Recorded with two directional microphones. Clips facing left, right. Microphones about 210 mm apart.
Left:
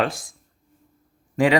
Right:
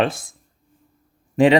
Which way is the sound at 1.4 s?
25° right (ahead or behind).